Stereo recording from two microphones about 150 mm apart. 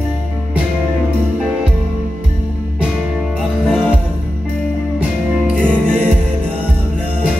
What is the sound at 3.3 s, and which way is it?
Music, 5° right (ahead or behind).